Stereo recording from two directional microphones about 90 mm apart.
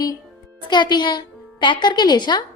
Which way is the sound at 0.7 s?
55° left (ahead or behind).